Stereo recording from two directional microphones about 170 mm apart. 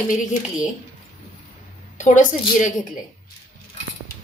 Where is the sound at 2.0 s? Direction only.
50° left (ahead or behind).